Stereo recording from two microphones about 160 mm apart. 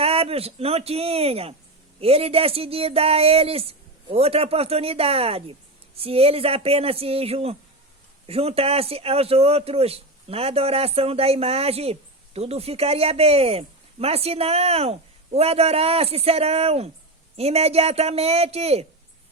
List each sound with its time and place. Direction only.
0.0 s a man's voice: 35° right (ahead or behind)